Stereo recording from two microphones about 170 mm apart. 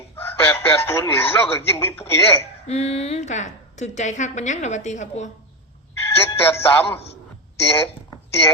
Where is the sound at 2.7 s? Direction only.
40° left (ahead or behind).